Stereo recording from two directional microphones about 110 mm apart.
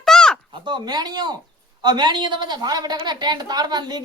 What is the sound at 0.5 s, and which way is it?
A woman's voice, 45° right (ahead or behind).